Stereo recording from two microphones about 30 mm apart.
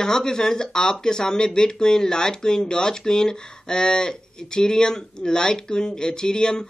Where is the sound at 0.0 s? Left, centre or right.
Left.